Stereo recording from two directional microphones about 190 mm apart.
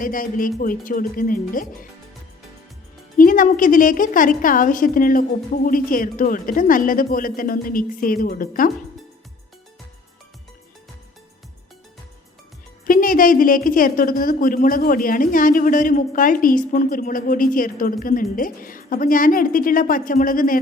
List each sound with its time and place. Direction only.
0.0 s a woman's voice: 45° left (ahead or behind)
3.2 s a woman's voice: 45° left (ahead or behind)
12.8 s a woman's voice: 45° left (ahead or behind)